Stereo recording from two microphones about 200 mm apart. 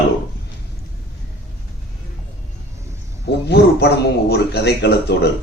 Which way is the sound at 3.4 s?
55° left (ahead or behind).